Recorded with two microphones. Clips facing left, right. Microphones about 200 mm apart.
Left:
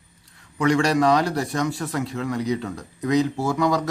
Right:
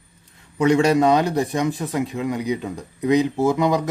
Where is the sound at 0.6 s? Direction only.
20° right (ahead or behind).